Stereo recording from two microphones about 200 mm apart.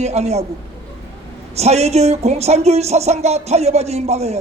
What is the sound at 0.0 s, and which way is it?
Speech, 30° right (ahead or behind).